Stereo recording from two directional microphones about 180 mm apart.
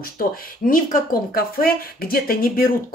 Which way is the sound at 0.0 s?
50° left (ahead or behind).